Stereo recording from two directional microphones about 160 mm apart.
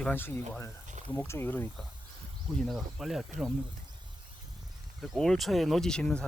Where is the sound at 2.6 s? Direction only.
Centre (ahead or behind).